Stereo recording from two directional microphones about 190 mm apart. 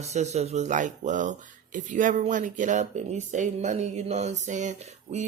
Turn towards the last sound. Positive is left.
turn(degrees=-35)  # may be behind; listen again after turning